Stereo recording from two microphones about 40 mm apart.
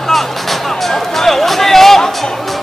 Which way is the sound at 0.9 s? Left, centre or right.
Centre.